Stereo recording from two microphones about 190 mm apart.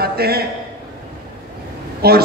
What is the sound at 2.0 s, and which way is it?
Speech, 55° right (ahead or behind).